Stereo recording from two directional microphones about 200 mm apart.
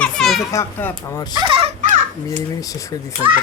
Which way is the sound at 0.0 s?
Centre (ahead or behind).